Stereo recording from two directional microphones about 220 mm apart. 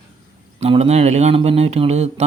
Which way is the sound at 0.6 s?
30° right (ahead or behind).